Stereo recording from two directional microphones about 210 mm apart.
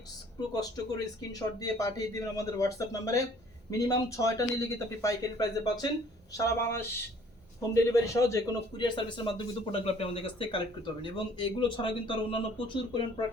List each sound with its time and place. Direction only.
0.5 s a man's voice: 20° left (ahead or behind)